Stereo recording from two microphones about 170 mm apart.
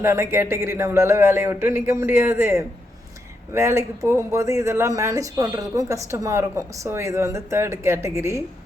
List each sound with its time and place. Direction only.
0.0 s speech: 15° right (ahead or behind)